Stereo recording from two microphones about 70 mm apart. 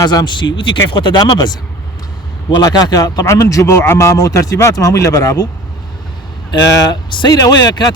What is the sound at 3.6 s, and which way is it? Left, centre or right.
A man's voice, left.